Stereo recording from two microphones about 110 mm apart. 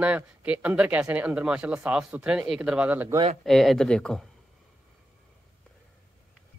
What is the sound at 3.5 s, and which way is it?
Speech, centre (ahead or behind).